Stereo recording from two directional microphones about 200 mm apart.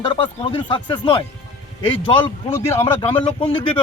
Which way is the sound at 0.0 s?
25° left (ahead or behind).